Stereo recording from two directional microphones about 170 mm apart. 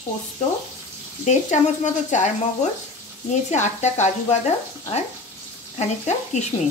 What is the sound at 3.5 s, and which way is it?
Speech, 40° left (ahead or behind).